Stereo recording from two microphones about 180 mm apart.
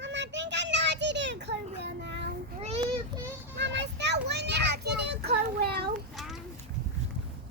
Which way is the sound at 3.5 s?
75° right (ahead or behind).